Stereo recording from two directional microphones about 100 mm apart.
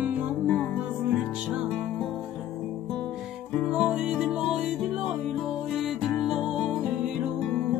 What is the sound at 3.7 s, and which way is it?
Music, 10° right (ahead or behind).